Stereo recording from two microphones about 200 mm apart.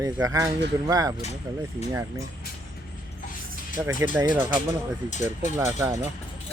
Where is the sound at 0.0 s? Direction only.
15° right (ahead or behind).